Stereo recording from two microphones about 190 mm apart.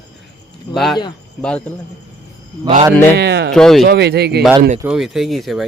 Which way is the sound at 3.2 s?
60° right (ahead or behind).